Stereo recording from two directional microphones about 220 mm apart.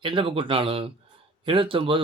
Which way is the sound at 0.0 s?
25° right (ahead or behind).